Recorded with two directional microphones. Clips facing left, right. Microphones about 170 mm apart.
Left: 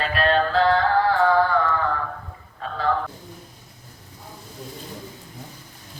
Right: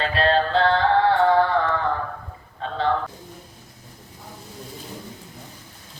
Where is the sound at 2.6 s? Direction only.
25° right (ahead or behind).